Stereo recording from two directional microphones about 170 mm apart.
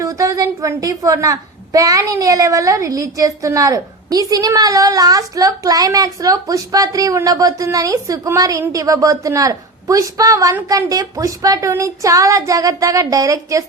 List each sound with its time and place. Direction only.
0.0 s a woman's voice: 20° right (ahead or behind)